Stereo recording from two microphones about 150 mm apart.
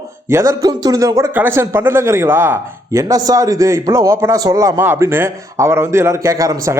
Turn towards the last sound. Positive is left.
turn(degrees=-20)  # may be behind; listen again after turning